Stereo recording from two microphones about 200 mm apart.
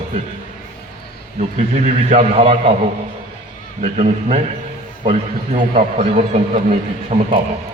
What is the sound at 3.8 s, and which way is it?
A man's voice, 35° right (ahead or behind).